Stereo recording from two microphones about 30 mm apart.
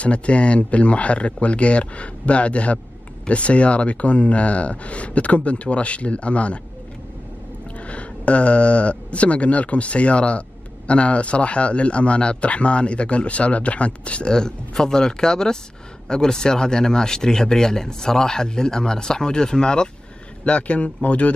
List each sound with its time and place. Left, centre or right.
0.0 s speech: left
7.7 s speech: left
14.2 s speech: left
20.4 s speech: left